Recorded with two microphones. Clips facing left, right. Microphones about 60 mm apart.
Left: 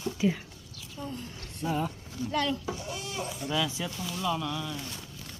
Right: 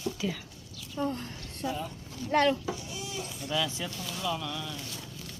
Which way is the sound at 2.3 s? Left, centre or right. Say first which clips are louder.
Right 5 dB; right.